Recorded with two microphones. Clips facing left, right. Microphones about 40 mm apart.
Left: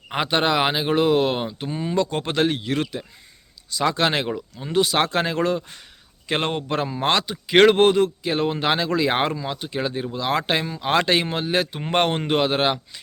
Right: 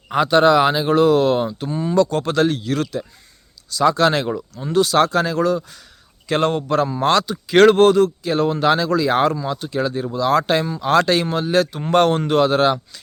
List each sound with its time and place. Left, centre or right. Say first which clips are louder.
0.1 s speech: right 7 dB; centre
6.2 s speech: right 5 dB; left
9.3 s speech: right 4 dB; centre